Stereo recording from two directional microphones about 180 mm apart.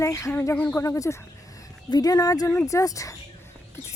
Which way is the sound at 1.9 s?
20° left (ahead or behind).